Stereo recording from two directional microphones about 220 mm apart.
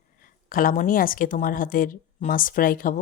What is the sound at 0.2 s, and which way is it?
A woman's voice, 40° left (ahead or behind).